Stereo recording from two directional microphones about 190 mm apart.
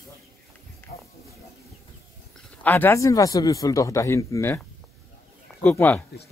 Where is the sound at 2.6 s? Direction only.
10° left (ahead or behind).